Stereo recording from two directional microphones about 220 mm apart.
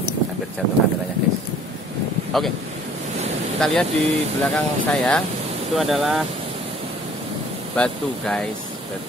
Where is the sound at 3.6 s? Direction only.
Centre (ahead or behind).